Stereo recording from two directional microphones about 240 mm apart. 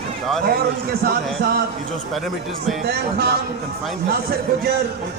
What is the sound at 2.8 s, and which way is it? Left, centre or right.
Speech, right.